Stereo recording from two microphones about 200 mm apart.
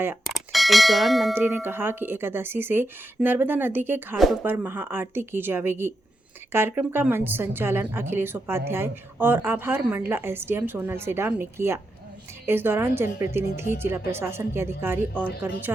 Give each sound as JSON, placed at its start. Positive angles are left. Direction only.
{"t": 0.3, "sound": "speech", "side_deg": 0}
{"t": 1.4, "sound": "a woman's voice", "side_deg": -10}